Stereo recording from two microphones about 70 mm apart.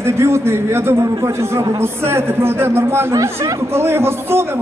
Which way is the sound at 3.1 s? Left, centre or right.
Right.